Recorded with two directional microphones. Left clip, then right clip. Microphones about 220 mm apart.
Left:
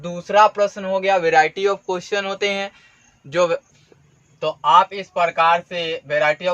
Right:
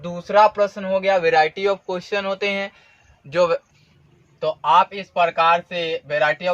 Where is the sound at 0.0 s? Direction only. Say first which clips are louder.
Left 1 dB; 20° left (ahead or behind).